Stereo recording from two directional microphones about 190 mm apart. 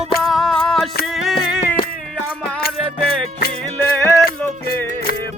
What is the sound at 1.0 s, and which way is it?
Music, centre (ahead or behind).